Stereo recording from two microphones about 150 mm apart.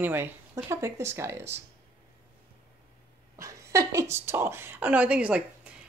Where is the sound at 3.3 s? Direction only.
20° right (ahead or behind).